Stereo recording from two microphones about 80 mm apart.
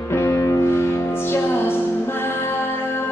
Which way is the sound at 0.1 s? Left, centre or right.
Left.